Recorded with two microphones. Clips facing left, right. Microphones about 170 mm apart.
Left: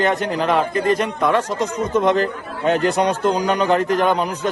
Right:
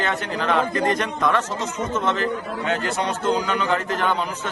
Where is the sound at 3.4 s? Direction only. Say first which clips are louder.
Left 6 dB; 35° left (ahead or behind).